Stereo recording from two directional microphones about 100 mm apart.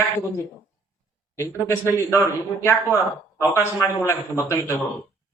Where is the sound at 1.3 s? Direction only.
25° right (ahead or behind).